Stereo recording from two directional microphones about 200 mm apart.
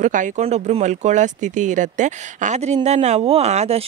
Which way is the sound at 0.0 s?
40° right (ahead or behind).